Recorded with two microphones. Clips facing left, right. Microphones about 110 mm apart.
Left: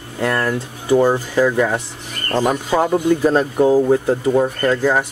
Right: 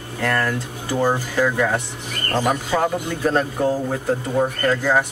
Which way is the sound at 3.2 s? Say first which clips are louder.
Left 5 dB; 15° left (ahead or behind).